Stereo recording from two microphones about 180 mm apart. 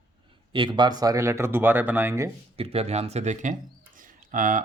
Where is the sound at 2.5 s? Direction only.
35° right (ahead or behind).